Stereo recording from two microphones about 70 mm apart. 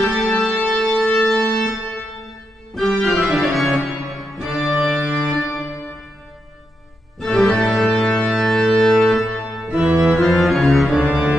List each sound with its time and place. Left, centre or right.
0.0 s organ: centre
7.2 s organ: centre
9.7 s music: centre
10.1 s music: centre
11.1 s music: right